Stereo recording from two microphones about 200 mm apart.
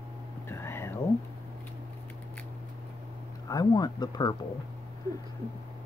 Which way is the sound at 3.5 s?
20° left (ahead or behind).